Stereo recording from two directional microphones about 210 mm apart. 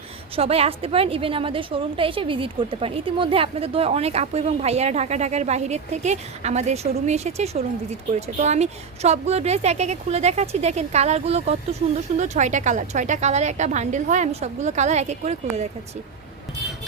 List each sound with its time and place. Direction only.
0.3 s a woman's voice: 30° right (ahead or behind)